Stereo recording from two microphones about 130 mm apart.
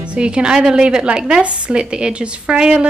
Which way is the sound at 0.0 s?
10° right (ahead or behind).